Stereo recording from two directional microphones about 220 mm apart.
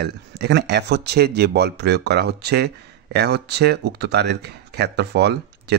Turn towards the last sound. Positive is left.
turn(degrees=-50)  # may be behind; listen again after turning